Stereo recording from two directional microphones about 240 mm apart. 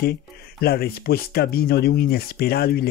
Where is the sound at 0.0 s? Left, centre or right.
Left.